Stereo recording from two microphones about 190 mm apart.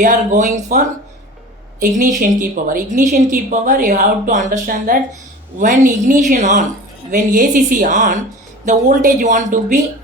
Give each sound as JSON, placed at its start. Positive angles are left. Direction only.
{"t": 0.0, "sound": "a woman's voice", "side_deg": -40}
{"t": 2.0, "sound": "a woman's voice", "side_deg": -45}